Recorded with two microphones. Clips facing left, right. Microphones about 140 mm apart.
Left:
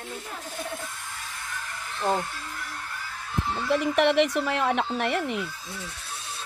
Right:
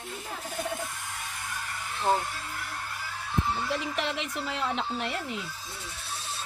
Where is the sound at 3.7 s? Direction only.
60° left (ahead or behind).